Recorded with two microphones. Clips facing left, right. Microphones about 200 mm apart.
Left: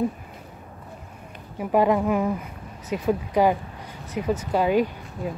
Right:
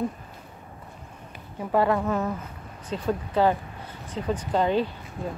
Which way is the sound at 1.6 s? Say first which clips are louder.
Left 3 dB; 15° left (ahead or behind).